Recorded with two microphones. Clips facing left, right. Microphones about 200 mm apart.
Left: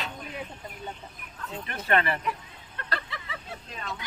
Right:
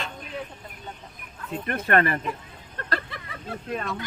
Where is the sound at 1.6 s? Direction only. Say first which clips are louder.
Right 4 dB; 55° right (ahead or behind).